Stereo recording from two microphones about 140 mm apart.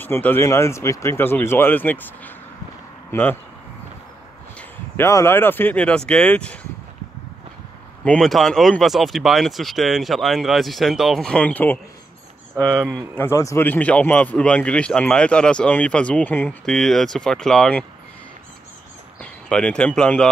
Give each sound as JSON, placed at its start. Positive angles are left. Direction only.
{"t": 0.0, "sound": "a man's voice", "side_deg": 15}
{"t": 4.6, "sound": "speech", "side_deg": 15}
{"t": 8.0, "sound": "a man's voice", "side_deg": 5}
{"t": 19.5, "sound": "a man's voice", "side_deg": 5}